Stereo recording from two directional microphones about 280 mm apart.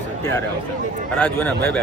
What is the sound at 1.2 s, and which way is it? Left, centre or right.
Speech, centre.